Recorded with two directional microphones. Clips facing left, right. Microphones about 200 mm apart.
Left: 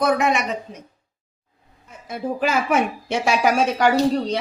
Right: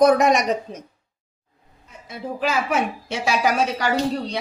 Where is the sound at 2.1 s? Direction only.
55° left (ahead or behind).